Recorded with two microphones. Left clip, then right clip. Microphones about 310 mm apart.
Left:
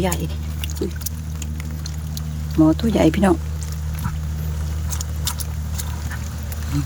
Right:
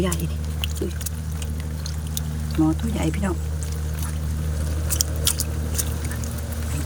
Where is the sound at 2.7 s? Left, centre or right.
Centre.